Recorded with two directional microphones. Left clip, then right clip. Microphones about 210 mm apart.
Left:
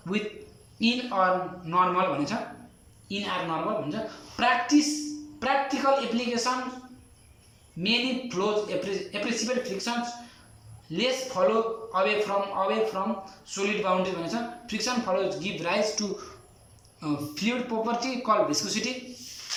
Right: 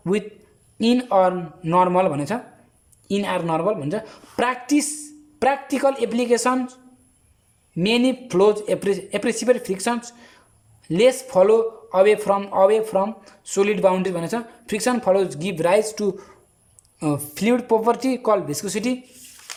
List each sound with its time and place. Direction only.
0.1 s a man's voice: 40° right (ahead or behind)
7.8 s a man's voice: 45° right (ahead or behind)
10.9 s a man's voice: 45° right (ahead or behind)